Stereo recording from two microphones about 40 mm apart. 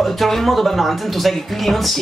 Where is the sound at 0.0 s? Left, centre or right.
Centre.